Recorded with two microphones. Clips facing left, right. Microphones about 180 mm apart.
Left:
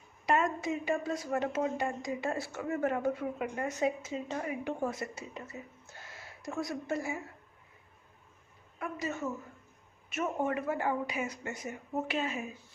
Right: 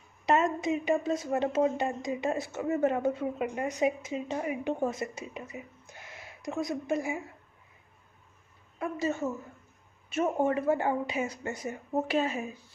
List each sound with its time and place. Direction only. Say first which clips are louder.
0.3 s a woman's voice: right 3 dB; 25° right (ahead or behind)
8.8 s a woman's voice: right 5 dB; 30° right (ahead or behind)